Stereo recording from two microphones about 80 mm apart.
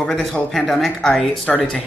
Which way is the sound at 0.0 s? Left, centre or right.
Centre.